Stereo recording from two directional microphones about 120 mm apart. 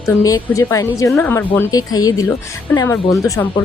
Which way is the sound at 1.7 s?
30° left (ahead or behind).